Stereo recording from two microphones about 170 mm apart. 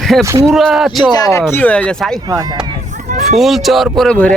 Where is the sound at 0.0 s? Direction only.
Centre (ahead or behind).